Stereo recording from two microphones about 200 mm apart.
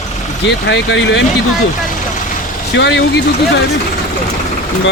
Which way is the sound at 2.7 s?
60° left (ahead or behind).